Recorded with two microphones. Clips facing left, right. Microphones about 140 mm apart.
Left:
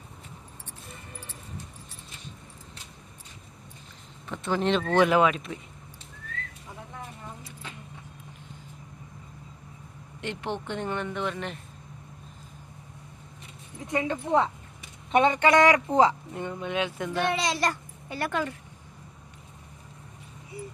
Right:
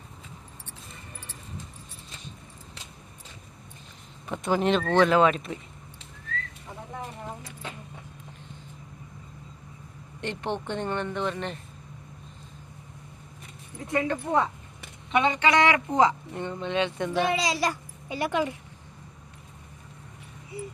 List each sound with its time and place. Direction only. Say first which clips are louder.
4.3 s speech: right 2 dB; 10° right (ahead or behind)
4.9 s speech: right 1 dB; 15° left (ahead or behind)
5.3 s a child's voice: right 2 dB; centre (ahead or behind)
10.2 s a child's voice: right 2 dB; centre (ahead or behind)
13.8 s speech: right 1 dB; 15° left (ahead or behind)
15.1 s speech: left 2 dB; 45° left (ahead or behind)
16.3 s a child's voice: right 2 dB; 5° left (ahead or behind)
18.1 s speech: right 3 dB; 15° right (ahead or behind)